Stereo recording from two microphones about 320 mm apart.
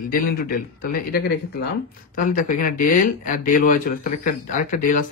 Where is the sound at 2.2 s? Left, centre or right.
Left.